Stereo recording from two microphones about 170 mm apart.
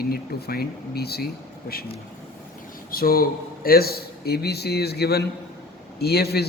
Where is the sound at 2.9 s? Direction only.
60° left (ahead or behind).